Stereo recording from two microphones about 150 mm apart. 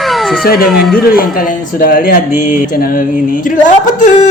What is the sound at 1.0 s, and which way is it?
Speech, 75° left (ahead or behind).